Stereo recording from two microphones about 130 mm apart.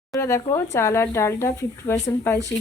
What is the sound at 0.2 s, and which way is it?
Speech, 25° left (ahead or behind).